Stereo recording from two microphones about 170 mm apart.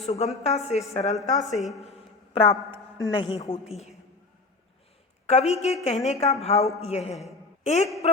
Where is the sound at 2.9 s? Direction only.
25° left (ahead or behind).